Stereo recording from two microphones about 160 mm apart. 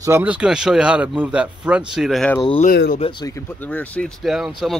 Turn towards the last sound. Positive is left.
turn(degrees=0)  # may be behind; listen again after turning